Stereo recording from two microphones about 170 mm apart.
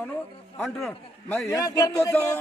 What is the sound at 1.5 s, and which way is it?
Speech, 20° left (ahead or behind).